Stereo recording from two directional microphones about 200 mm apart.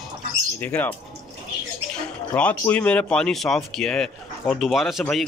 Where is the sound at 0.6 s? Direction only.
10° left (ahead or behind).